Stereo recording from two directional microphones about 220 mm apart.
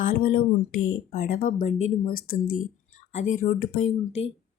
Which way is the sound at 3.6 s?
75° left (ahead or behind).